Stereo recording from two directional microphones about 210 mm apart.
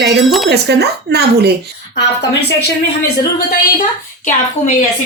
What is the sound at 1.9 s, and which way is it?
Speech, 55° left (ahead or behind).